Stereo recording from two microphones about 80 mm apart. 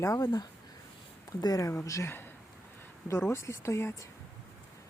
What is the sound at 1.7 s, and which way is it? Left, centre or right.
Speech, left.